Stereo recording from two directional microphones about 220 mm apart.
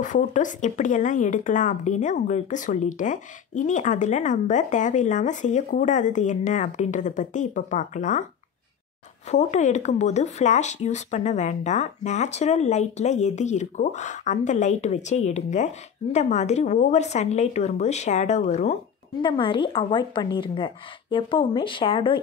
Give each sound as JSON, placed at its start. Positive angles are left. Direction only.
{"t": 0.0, "sound": "speech", "side_deg": 35}
{"t": 9.3, "sound": "a woman's voice", "side_deg": 30}